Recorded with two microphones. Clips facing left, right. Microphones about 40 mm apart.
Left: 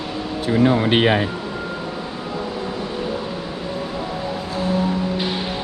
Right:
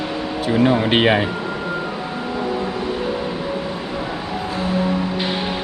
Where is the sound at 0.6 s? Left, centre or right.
Right.